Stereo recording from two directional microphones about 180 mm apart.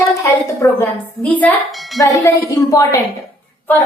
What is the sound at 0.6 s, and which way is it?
A woman's voice, 10° left (ahead or behind).